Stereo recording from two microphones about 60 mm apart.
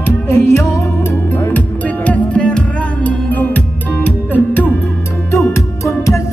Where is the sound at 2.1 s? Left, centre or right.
Left.